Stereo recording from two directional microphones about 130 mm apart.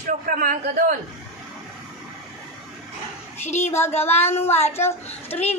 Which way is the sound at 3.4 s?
60° left (ahead or behind).